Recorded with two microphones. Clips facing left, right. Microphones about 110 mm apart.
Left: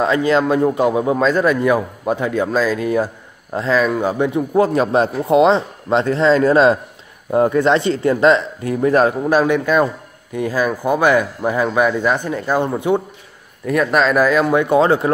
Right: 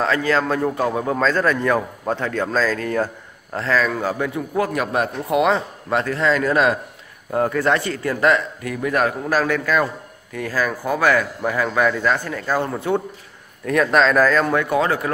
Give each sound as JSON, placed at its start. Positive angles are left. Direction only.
{"t": 0.0, "sound": "a man's voice", "side_deg": 20}
{"t": 13.7, "sound": "speech", "side_deg": 5}